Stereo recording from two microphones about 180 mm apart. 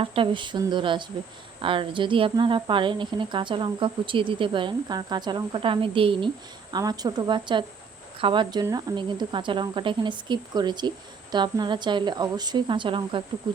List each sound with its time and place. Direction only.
0.0 s a woman's voice: 30° right (ahead or behind)